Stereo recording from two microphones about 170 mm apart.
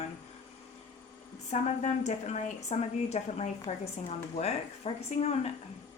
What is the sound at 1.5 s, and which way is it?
Speech, 45° left (ahead or behind).